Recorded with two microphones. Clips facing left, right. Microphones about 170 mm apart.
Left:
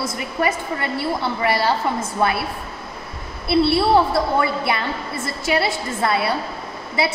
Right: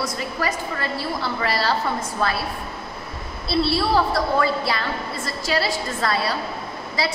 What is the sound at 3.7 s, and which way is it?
A woman's voice, 25° left (ahead or behind).